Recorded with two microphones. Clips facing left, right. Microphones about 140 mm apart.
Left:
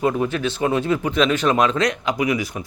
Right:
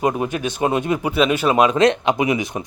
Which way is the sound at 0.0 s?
20° right (ahead or behind).